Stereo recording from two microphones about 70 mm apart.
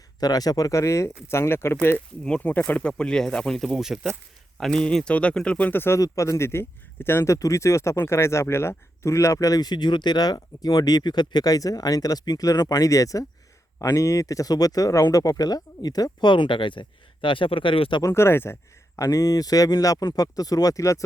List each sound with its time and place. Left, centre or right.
0.2 s speech: left
2.4 s speech: left; by 3.8 s centre
3.8 s speech: centre
4.5 s speech: centre
5.7 s speech: left
6.0 s speech: left
7.3 s speech: left
18.0 s speech: left
18.9 s speech: left